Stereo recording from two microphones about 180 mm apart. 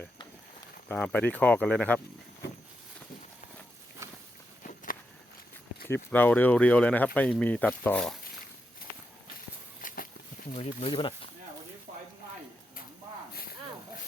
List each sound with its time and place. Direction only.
0.9 s speech: 10° left (ahead or behind)
4.0 s walk: 15° right (ahead or behind)
5.9 s speech: 10° left (ahead or behind)
9.8 s a sound: 50° left (ahead or behind)
10.5 s speech: 35° left (ahead or behind)